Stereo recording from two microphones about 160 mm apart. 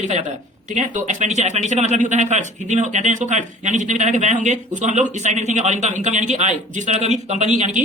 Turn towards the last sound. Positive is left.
turn(degrees=-50)  # may be behind; listen again after turning